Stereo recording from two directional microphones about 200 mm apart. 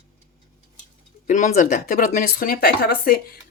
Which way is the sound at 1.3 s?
35° left (ahead or behind).